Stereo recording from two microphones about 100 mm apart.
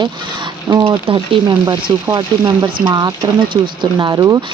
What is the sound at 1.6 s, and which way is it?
Speech, 40° right (ahead or behind).